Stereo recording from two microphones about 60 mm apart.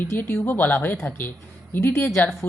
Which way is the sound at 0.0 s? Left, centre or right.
Left.